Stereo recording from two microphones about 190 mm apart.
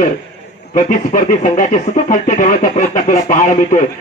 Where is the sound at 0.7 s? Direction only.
45° left (ahead or behind).